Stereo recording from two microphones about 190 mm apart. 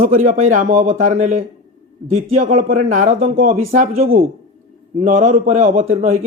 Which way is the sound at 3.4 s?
45° right (ahead or behind).